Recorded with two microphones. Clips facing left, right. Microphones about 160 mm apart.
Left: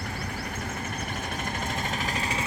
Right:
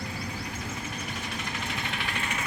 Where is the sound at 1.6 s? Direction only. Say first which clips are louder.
Left 3 dB; 40° left (ahead or behind).